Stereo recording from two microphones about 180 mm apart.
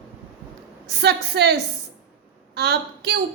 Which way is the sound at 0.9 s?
65° right (ahead or behind).